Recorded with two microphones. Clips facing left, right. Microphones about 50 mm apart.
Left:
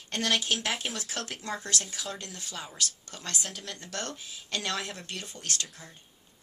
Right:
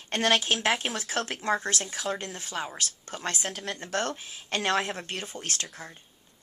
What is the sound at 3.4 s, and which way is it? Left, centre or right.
Speech, centre.